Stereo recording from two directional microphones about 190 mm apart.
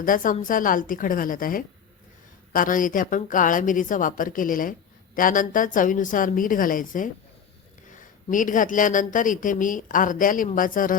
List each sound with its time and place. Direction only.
0.0 s a woman's voice: 45° left (ahead or behind)
8.3 s a woman's voice: 45° left (ahead or behind)